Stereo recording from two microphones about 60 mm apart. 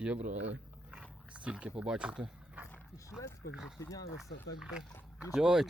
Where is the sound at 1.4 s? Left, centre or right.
Right.